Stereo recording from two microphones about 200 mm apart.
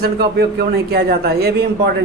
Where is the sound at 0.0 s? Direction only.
55° right (ahead or behind).